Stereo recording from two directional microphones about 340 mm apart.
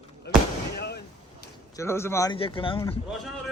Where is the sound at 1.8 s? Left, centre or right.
Centre.